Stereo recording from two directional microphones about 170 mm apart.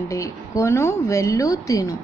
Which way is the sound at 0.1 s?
20° left (ahead or behind).